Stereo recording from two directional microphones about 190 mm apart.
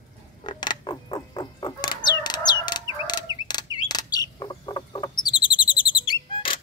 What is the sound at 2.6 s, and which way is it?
Crowing, 20° left (ahead or behind).